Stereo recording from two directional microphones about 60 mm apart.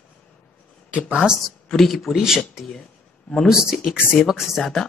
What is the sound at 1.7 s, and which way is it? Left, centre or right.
Speech, centre.